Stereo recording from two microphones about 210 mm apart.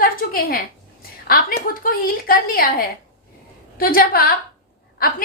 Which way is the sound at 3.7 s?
45° left (ahead or behind).